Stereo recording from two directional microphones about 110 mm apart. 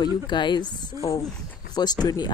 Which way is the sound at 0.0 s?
40° left (ahead or behind).